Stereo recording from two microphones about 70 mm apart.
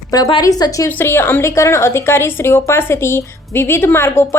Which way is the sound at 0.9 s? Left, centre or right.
Left.